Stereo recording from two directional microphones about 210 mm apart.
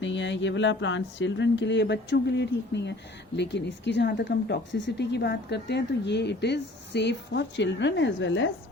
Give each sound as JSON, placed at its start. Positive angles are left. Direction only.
{"t": 0.0, "sound": "speech", "side_deg": 60}